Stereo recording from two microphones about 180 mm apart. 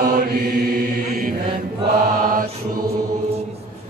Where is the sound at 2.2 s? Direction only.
50° right (ahead or behind).